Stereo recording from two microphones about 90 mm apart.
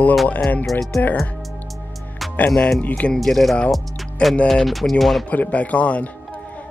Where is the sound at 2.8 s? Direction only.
15° left (ahead or behind).